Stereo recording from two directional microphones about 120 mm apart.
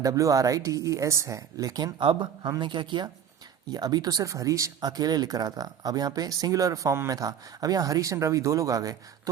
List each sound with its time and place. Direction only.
0.0 s speech: 30° right (ahead or behind)